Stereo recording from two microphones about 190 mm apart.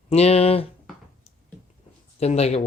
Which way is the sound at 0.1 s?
35° left (ahead or behind).